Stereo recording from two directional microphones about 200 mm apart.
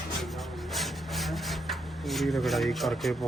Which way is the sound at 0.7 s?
Centre (ahead or behind).